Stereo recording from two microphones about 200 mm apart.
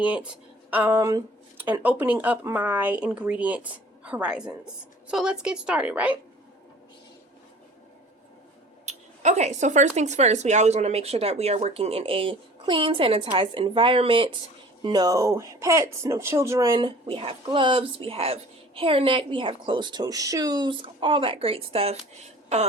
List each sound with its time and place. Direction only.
0.0 s a woman's voice: 5° right (ahead or behind)
8.9 s speech: 35° right (ahead or behind)